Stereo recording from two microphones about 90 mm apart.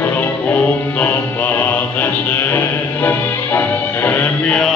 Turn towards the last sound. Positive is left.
turn(degrees=10)  # may be behind; listen again after turning